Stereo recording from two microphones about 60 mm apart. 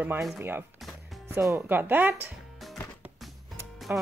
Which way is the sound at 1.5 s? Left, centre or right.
Right.